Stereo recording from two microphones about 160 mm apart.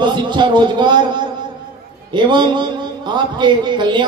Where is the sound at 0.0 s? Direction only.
30° right (ahead or behind).